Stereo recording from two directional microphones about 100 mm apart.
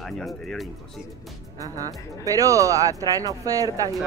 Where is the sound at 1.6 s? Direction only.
35° right (ahead or behind).